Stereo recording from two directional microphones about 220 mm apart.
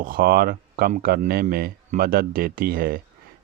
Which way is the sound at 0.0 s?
40° right (ahead or behind).